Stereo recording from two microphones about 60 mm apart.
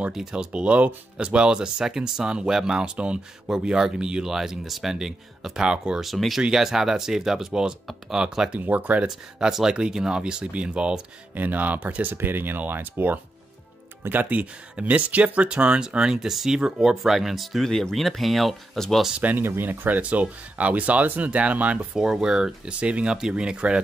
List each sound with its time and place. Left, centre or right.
0.1 s speech: centre
0.5 s speech: right
6.0 s speech: centre
8.5 s speech: right
9.0 s speech: centre
11.3 s speech: right; by 19.0 s centre
19.3 s speech: right
21.9 s speech: centre